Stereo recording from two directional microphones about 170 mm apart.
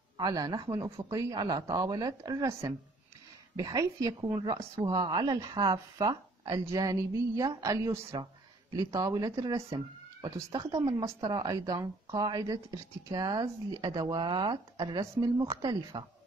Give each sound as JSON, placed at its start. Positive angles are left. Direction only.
{"t": 0.2, "sound": "a woman's voice", "side_deg": -25}